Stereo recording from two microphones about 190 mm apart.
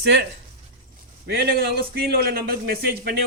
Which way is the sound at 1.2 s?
55° right (ahead or behind).